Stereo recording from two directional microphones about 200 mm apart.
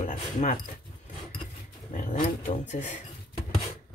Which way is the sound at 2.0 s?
40° left (ahead or behind).